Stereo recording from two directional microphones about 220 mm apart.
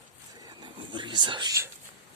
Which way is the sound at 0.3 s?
20° right (ahead or behind).